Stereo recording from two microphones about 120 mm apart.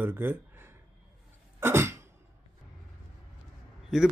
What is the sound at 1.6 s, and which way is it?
Cough, 20° right (ahead or behind).